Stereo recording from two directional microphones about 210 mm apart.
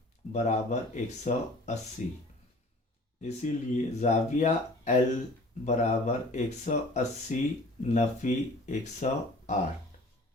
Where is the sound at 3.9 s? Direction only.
35° left (ahead or behind).